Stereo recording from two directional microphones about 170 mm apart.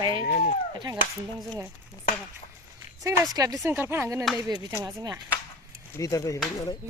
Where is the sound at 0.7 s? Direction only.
25° right (ahead or behind).